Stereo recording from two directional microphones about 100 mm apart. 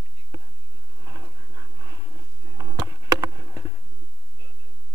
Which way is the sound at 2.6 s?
35° right (ahead or behind).